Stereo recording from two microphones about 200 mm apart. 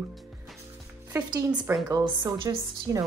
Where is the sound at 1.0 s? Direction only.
15° right (ahead or behind).